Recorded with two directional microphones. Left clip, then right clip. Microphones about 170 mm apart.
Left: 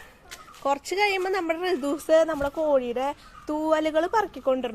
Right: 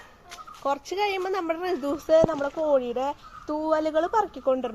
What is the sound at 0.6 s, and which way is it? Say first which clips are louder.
A woman's voice: left 2 dB; 20° left (ahead or behind).